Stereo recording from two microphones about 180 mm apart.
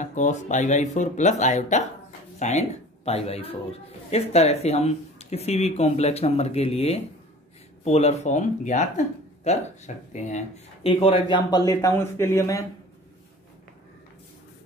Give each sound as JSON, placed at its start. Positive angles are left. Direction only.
{"t": 0.0, "sound": "speech", "side_deg": 45}
{"t": 10.9, "sound": "speech", "side_deg": 30}